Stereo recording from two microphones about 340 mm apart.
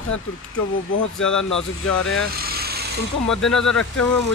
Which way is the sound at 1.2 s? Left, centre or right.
Centre.